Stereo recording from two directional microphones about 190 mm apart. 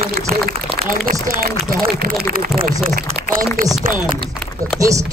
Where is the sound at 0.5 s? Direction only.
50° right (ahead or behind).